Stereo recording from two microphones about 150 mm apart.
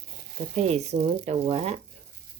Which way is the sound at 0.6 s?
45° right (ahead or behind).